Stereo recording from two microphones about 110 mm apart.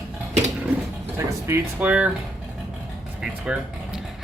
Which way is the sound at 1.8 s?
10° right (ahead or behind).